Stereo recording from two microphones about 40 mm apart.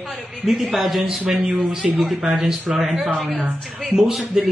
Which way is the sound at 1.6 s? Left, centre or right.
Centre.